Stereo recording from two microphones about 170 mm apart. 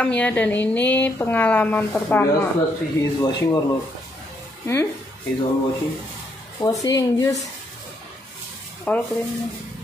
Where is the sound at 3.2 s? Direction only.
20° left (ahead or behind).